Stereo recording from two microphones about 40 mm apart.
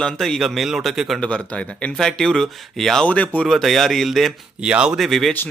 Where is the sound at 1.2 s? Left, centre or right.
Left.